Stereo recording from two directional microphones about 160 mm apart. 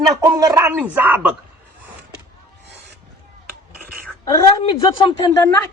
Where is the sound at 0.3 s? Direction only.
20° right (ahead or behind).